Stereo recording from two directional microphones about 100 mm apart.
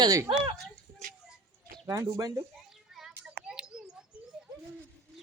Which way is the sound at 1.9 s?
30° right (ahead or behind).